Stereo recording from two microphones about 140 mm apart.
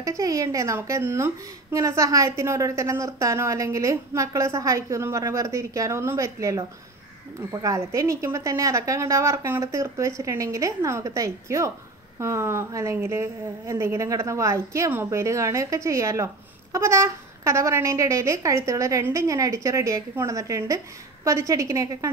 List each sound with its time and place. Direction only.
0.0 s a woman's voice: 20° right (ahead or behind)